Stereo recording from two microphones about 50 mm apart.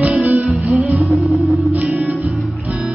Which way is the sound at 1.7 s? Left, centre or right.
Right.